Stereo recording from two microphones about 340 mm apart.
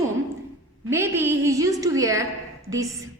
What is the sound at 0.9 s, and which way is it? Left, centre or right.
A woman's voice, centre.